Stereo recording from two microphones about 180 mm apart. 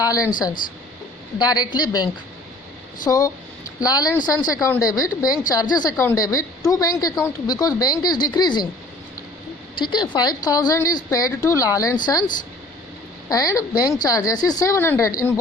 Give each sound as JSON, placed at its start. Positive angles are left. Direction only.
{"t": 0.0, "sound": "a woman's voice", "side_deg": 20}
{"t": 9.7, "sound": "a woman's voice", "side_deg": 25}
{"t": 13.3, "sound": "a woman's voice", "side_deg": 20}